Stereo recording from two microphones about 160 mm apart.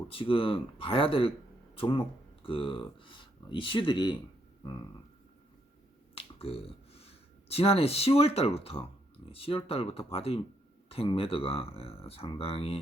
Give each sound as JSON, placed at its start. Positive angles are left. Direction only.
{"t": 0.1, "sound": "speech", "side_deg": 35}
{"t": 6.1, "sound": "speech", "side_deg": 35}